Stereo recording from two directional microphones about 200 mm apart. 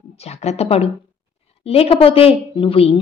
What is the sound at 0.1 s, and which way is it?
A woman's voice, 30° left (ahead or behind).